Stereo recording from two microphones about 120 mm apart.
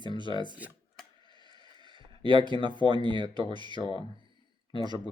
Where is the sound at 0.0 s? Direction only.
40° right (ahead or behind).